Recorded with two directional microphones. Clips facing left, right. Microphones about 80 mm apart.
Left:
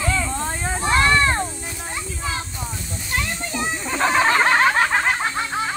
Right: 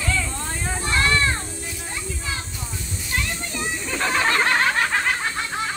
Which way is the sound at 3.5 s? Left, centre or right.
Left.